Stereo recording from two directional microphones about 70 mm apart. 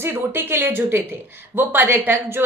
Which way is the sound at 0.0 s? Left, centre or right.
Right.